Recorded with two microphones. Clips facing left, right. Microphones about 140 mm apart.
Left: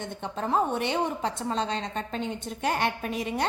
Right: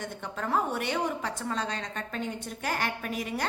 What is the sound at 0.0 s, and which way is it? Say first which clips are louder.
A woman's voice: left 3 dB; 25° left (ahead or behind).